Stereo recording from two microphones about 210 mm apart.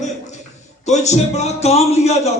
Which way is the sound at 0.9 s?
35° left (ahead or behind).